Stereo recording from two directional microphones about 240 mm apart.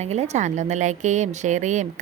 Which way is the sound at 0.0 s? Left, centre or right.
Right.